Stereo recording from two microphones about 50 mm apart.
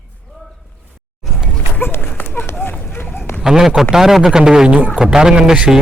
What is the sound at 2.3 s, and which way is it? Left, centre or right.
Run, left.